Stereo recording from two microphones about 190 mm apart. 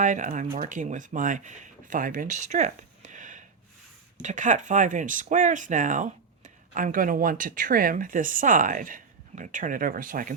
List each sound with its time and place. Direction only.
0.0 s speech: 40° right (ahead or behind)